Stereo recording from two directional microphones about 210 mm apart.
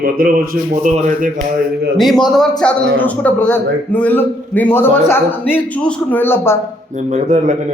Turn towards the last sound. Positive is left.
turn(degrees=-35)  # may be behind; listen again after turning